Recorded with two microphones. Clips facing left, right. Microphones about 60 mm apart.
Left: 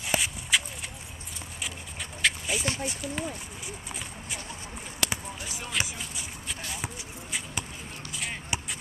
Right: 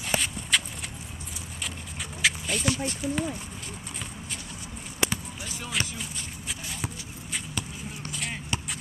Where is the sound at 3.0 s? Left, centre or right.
Centre.